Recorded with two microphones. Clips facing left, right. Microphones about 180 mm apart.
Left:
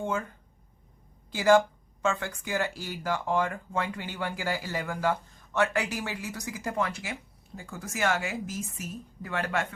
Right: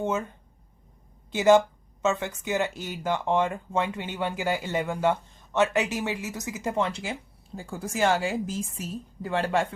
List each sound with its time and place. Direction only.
0.0 s speech: 20° right (ahead or behind)